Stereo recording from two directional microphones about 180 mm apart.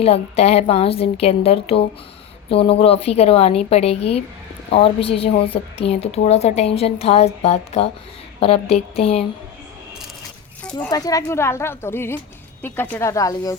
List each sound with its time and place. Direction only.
0.0 s a woman's voice: 35° left (ahead or behind)
10.6 s a sound: 5° left (ahead or behind)
10.9 s a woman's voice: 20° left (ahead or behind)